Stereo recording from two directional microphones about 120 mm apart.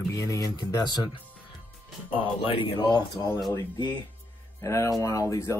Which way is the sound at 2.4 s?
45° left (ahead or behind).